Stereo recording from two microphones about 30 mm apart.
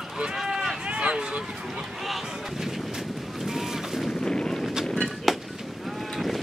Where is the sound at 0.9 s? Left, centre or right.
Right.